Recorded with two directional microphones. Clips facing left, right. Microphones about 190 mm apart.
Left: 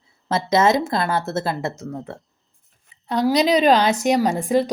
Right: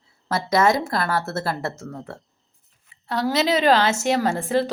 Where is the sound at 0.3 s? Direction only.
20° left (ahead or behind).